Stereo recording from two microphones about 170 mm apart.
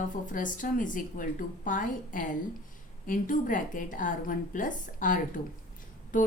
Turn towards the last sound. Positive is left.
turn(degrees=50)  # may be behind; listen again after turning